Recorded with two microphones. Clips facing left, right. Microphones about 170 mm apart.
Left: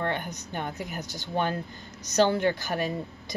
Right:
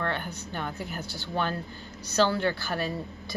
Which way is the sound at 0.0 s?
15° left (ahead or behind).